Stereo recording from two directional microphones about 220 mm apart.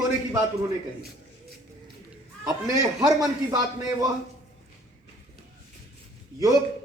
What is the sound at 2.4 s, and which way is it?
A man's voice, 15° right (ahead or behind).